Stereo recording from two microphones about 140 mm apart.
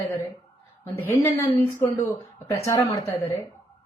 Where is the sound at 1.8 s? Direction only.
20° left (ahead or behind).